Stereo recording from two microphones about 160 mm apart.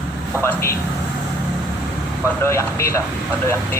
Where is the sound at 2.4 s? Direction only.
15° left (ahead or behind).